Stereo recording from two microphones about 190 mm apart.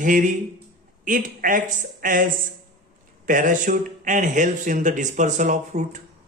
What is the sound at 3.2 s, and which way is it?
A man's voice, 45° right (ahead or behind).